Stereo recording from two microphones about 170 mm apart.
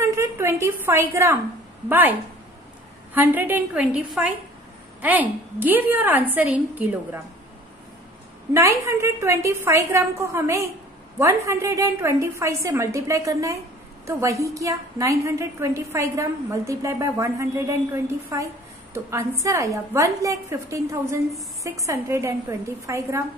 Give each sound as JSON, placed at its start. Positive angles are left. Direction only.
{"t": 0.0, "sound": "a woman's voice", "side_deg": -15}
{"t": 3.2, "sound": "a woman's voice", "side_deg": -10}
{"t": 8.5, "sound": "a woman's voice", "side_deg": -15}